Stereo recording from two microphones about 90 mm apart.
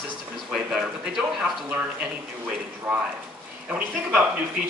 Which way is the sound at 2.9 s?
5° right (ahead or behind).